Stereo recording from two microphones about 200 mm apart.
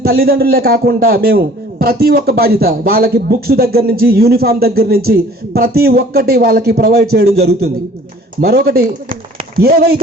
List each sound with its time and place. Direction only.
0.0 s a man's voice: 50° right (ahead or behind)